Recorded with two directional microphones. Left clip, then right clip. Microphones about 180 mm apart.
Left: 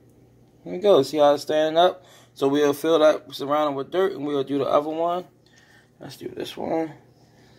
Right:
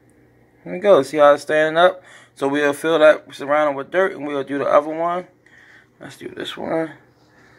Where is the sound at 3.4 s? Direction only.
5° left (ahead or behind).